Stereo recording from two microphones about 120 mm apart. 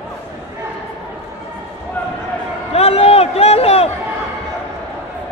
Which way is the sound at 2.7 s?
60° left (ahead or behind).